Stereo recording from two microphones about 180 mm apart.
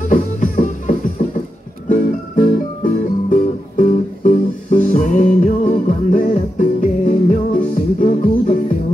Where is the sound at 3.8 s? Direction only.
45° left (ahead or behind).